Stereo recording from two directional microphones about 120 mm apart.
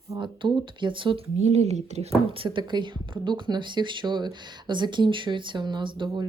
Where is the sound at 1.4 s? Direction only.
65° right (ahead or behind).